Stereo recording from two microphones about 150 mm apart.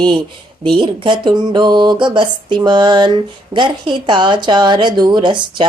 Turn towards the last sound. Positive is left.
turn(degrees=-30)  # may be behind; listen again after turning